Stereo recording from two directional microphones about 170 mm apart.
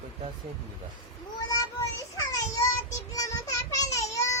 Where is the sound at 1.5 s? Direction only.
20° left (ahead or behind).